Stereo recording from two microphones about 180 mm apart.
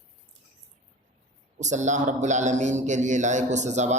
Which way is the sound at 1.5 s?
40° right (ahead or behind).